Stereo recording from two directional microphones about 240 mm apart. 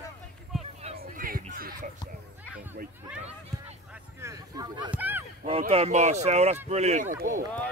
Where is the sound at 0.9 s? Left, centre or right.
Right.